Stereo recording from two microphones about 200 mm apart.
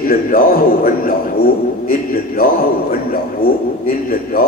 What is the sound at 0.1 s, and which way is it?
A man's voice, 45° left (ahead or behind).